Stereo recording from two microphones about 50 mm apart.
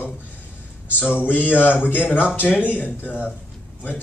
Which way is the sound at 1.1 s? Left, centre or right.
Left.